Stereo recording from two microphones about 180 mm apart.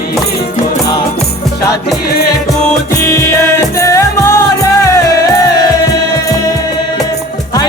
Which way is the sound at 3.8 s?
15° left (ahead or behind).